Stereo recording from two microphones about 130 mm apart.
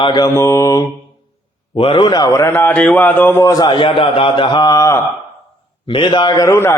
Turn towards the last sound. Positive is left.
turn(degrees=20)  # may be behind; listen again after turning